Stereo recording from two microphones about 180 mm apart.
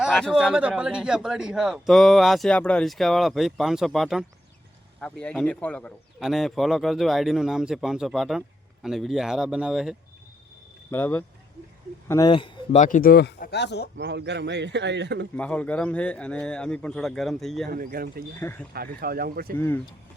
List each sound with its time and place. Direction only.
0.0 s a man's voice: centre (ahead or behind)
10.9 s speech: 10° left (ahead or behind); by 12.8 s 30° left (ahead or behind)
12.8 s speech: 50° left (ahead or behind); by 13.9 s 70° left (ahead or behind)
13.9 s speech: 70° right (ahead or behind)
15.4 s a man's voice: 5° left (ahead or behind)
17.7 s speech: 55° right (ahead or behind)
18.3 s speech: 10° left (ahead or behind)
18.9 s speech: 55° right (ahead or behind)
19.5 s speech: 10° left (ahead or behind)